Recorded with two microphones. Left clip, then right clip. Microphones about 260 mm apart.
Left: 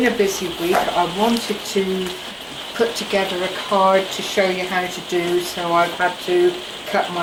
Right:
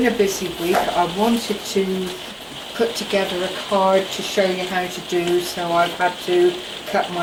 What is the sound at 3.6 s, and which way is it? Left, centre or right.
Speech, centre.